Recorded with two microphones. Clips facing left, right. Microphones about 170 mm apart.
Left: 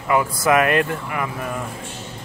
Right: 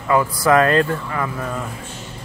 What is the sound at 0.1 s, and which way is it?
Speech, 20° left (ahead or behind).